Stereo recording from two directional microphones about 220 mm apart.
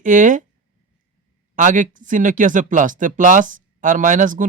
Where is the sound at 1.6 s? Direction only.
35° right (ahead or behind).